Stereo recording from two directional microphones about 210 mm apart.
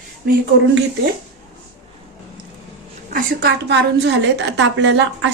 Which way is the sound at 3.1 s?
55° right (ahead or behind).